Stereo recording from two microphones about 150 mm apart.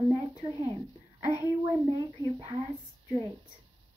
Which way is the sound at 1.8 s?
30° right (ahead or behind).